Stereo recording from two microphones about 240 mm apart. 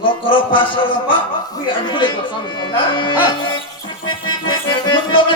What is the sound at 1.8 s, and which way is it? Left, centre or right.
Speech, left.